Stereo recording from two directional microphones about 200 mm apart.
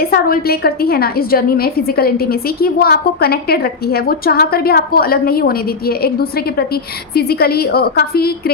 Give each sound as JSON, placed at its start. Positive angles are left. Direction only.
{"t": 0.0, "sound": "a woman's voice", "side_deg": 50}